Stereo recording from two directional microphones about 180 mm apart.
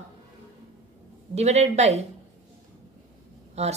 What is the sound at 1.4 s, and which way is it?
Speech, 40° right (ahead or behind).